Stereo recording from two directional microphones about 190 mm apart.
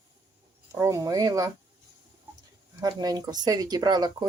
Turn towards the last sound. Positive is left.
turn(degrees=-20)  # may be behind; listen again after turning